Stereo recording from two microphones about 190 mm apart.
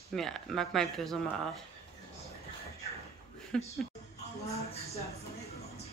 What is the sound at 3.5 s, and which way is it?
Speech, 5° left (ahead or behind).